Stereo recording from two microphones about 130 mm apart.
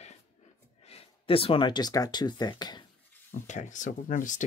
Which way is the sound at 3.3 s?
70° left (ahead or behind).